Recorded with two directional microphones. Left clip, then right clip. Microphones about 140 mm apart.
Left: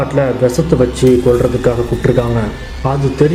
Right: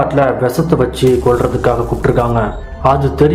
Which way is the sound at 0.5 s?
35° left (ahead or behind).